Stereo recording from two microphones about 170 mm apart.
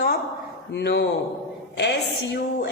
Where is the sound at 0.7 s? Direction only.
85° left.